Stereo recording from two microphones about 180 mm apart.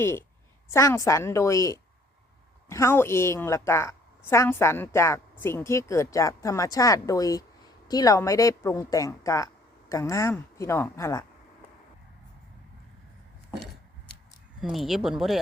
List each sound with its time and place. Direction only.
0.0 s a woman's voice: 15° left (ahead or behind)
14.6 s speech: centre (ahead or behind)